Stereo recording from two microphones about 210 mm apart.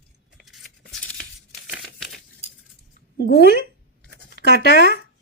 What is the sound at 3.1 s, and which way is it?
Speech, 50° left (ahead or behind).